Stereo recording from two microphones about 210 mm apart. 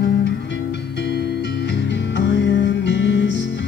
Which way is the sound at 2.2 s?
60° left (ahead or behind).